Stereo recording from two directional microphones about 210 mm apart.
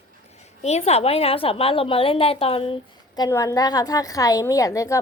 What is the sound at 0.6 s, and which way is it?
A woman's voice, 30° left (ahead or behind).